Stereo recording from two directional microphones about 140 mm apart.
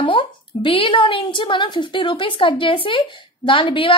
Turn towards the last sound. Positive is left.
turn(degrees=35)  # may be behind; listen again after turning